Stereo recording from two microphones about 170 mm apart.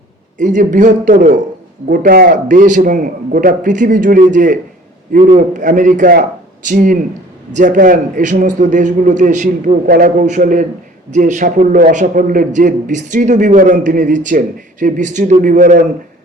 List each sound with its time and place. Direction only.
0.3 s a man's voice: 50° right (ahead or behind)